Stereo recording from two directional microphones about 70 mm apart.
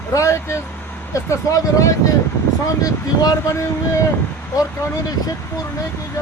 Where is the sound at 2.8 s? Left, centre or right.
Left.